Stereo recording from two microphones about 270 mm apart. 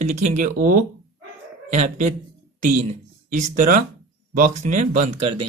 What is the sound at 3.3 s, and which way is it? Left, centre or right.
A man's voice, right.